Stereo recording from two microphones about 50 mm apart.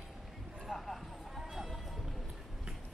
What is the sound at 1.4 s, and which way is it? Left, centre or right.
Music, centre.